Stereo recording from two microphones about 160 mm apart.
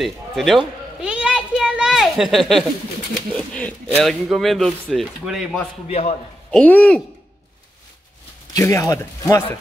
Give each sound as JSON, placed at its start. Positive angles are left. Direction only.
{"t": 0.0, "sound": "a sound", "side_deg": 0}
{"t": 3.3, "sound": "speech", "side_deg": 10}
{"t": 5.9, "sound": "a man's voice", "side_deg": 40}
{"t": 6.5, "sound": "speech", "side_deg": 10}
{"t": 8.5, "sound": "speech", "side_deg": 20}